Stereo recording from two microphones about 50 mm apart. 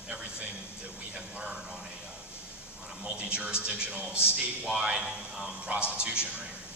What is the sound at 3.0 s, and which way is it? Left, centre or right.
A man's voice, right.